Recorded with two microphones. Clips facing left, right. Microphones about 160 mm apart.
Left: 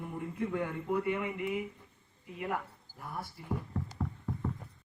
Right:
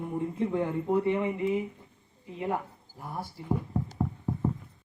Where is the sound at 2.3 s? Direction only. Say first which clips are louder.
Right 5 dB; 25° right (ahead or behind).